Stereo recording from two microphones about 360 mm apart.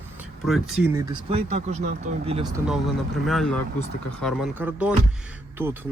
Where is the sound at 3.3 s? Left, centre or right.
Centre.